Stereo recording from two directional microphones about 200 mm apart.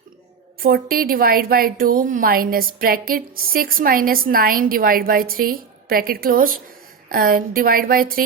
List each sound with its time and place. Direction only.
0.6 s a woman's voice: 45° right (ahead or behind)